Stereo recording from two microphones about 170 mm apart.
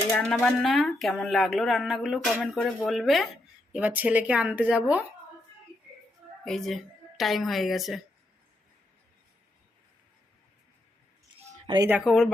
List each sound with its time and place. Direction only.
0.2 s speech: 5° left (ahead or behind)
6.4 s a woman's voice: centre (ahead or behind)
11.6 s speech: 25° right (ahead or behind)
11.9 s speech: 5° right (ahead or behind)